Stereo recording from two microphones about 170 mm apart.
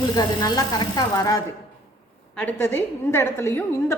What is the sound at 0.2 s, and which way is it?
Speech, 25° left (ahead or behind).